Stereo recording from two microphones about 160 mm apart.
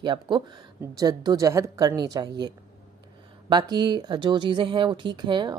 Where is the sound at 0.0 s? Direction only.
30° right (ahead or behind).